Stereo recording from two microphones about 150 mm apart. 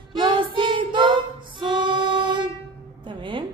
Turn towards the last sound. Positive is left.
turn(degrees=-35)  # may be behind; listen again after turning